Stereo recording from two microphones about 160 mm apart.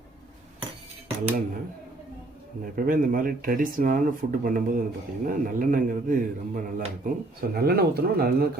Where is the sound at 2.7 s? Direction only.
60° right (ahead or behind).